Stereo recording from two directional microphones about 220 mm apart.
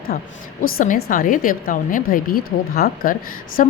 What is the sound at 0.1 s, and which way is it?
A woman's voice, 35° left (ahead or behind).